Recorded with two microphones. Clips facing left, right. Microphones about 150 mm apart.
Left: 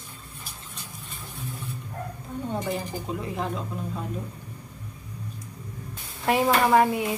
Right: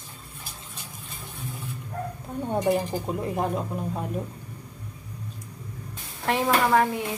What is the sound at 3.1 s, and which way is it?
Speech, 50° right (ahead or behind).